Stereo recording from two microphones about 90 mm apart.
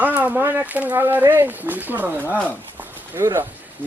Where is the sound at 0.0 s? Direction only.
20° right (ahead or behind).